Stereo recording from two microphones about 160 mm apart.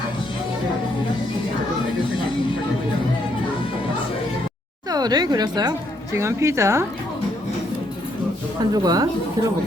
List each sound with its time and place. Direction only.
4.9 s a woman's voice: 25° right (ahead or behind)
8.7 s speech: 25° right (ahead or behind)